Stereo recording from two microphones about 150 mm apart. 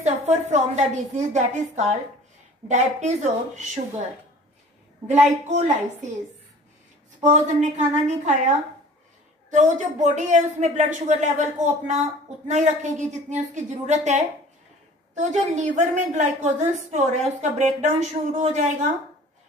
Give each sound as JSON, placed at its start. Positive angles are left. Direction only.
{"t": 0.0, "sound": "a woman's voice", "side_deg": -50}
{"t": 5.0, "sound": "a woman's voice", "side_deg": -50}
{"t": 7.2, "sound": "a woman's voice", "side_deg": -50}